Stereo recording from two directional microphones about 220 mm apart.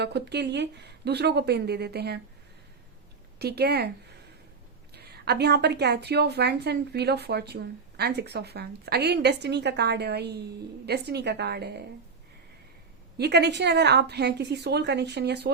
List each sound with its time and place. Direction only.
0.0 s a woman's voice: 50° right (ahead or behind)
3.3 s a woman's voice: 45° right (ahead or behind)
4.9 s a woman's voice: 45° right (ahead or behind)
13.1 s a woman's voice: 50° right (ahead or behind)